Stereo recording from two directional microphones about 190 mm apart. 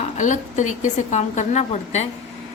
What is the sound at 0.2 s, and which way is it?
Speech, 40° left (ahead or behind).